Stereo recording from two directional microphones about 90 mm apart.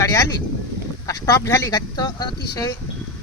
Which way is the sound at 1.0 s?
35° left (ahead or behind).